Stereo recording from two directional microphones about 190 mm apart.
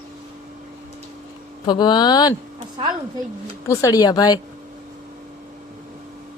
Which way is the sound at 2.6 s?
30° right (ahead or behind).